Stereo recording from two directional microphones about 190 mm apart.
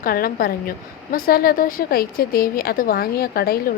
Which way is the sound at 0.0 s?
50° left (ahead or behind).